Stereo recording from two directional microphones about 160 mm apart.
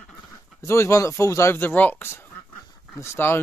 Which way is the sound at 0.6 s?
15° left (ahead or behind).